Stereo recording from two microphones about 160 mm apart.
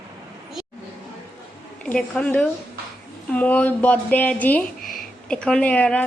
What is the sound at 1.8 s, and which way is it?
A woman's voice, 5° left (ahead or behind).